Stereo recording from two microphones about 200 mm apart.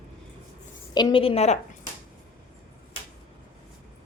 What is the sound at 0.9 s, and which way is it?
Speech, 25° left (ahead or behind).